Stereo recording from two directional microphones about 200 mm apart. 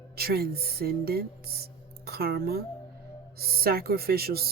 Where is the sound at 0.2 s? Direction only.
50° right (ahead or behind).